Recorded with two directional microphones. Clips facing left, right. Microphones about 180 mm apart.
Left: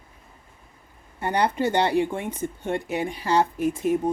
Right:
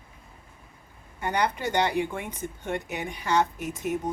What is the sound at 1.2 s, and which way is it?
Speech, 30° left (ahead or behind).